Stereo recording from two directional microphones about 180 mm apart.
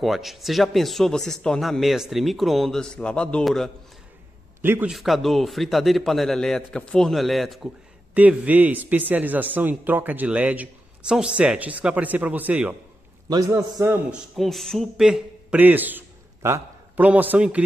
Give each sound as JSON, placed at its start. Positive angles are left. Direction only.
{"t": 0.0, "sound": "a man's voice", "side_deg": 0}
{"t": 4.6, "sound": "a man's voice", "side_deg": -10}
{"t": 13.3, "sound": "speech", "side_deg": -20}
{"t": 14.3, "sound": "a man's voice", "side_deg": 0}